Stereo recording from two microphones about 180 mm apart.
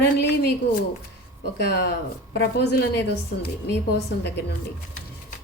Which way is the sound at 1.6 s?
60° left (ahead or behind).